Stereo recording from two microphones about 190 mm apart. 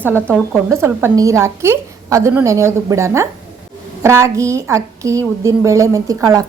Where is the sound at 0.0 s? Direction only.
10° right (ahead or behind).